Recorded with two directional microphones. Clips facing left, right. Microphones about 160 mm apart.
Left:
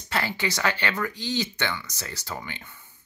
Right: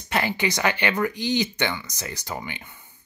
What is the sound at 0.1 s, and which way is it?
Speech, 20° right (ahead or behind).